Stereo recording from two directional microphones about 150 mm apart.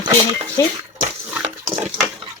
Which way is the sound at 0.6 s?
20° left (ahead or behind).